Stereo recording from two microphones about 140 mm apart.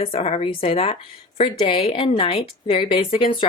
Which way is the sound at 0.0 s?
45° left (ahead or behind).